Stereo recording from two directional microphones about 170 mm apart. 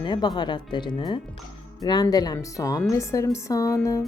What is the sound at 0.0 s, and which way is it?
Speech, 25° left (ahead or behind).